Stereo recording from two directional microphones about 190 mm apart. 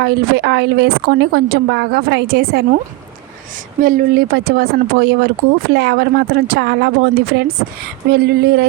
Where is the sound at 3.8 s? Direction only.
45° right (ahead or behind).